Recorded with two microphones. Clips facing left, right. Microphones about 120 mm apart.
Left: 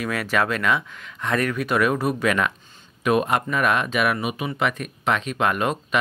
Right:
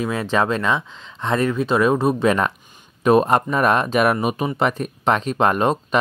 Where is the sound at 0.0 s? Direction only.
25° right (ahead or behind).